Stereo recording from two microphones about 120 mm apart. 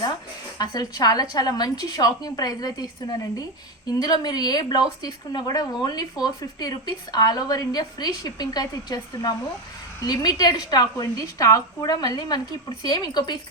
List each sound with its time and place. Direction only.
0.6 s a woman's voice: 35° left (ahead or behind)